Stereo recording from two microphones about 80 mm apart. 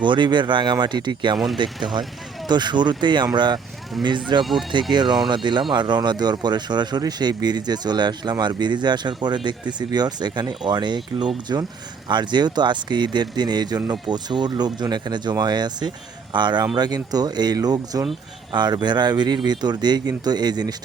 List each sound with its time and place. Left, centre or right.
0.0 s speech: right
11.5 s speech: right
12.0 s speech: right
16.7 s speech: right
18.5 s speech: right